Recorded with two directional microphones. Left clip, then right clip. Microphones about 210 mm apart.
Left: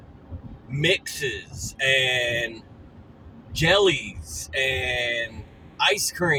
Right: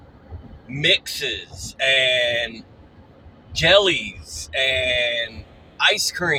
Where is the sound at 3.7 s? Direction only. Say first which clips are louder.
Right 4 dB; 10° left (ahead or behind).